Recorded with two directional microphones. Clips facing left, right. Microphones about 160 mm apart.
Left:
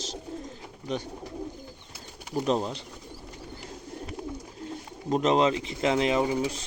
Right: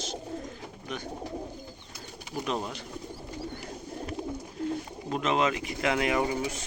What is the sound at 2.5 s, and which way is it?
Speech, 30° left (ahead or behind).